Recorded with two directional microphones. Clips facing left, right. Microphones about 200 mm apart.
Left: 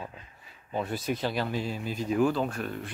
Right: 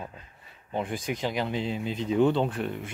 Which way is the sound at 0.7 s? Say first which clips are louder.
Even; 15° right (ahead or behind).